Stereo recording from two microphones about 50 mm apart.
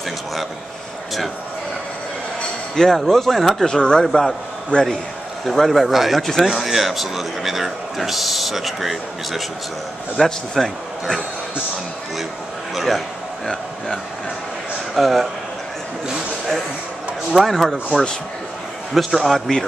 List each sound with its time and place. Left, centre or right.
2.7 s speech: centre
3.6 s speech: centre
4.0 s speech: centre
4.7 s a man's voice: left
5.4 s speech: centre
12.7 s a man's voice: centre
15.0 s speech: centre
17.3 s speech: centre
18.9 s speech: centre